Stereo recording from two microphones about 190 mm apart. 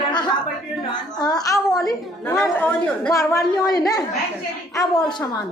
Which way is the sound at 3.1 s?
15° left (ahead or behind).